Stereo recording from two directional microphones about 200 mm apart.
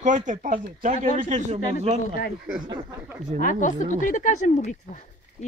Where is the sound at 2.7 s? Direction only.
20° right (ahead or behind).